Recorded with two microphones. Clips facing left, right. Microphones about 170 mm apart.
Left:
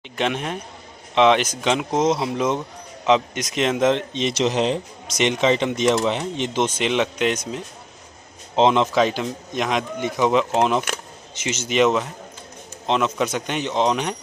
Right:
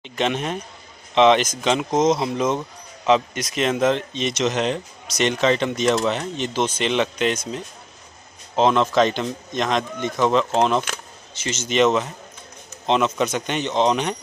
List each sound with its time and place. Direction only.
0.1 s speech: 10° left (ahead or behind)
3.5 s a man's voice: 20° left (ahead or behind)
5.2 s speech: 20° left (ahead or behind)
8.5 s a man's voice: 20° left (ahead or behind)
8.9 s speech: 5° left (ahead or behind)